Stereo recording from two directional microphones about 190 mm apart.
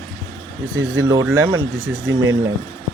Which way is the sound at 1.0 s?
15° right (ahead or behind).